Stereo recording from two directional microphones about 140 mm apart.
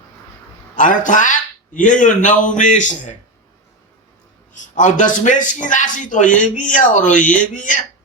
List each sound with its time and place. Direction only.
0.8 s speech: 65° left (ahead or behind)
4.5 s speech: 65° left (ahead or behind)